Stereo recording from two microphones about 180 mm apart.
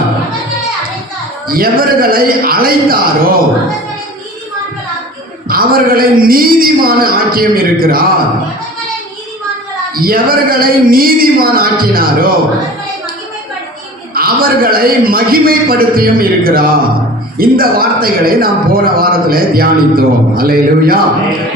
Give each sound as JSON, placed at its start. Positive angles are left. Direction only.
{"t": 1.5, "sound": "a man's voice", "side_deg": -55}
{"t": 5.5, "sound": "a man's voice", "side_deg": -55}
{"t": 9.9, "sound": "a man's voice", "side_deg": -55}
{"t": 14.1, "sound": "a man's voice", "side_deg": -55}